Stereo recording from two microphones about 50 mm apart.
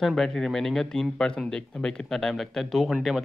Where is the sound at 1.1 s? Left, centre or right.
Centre.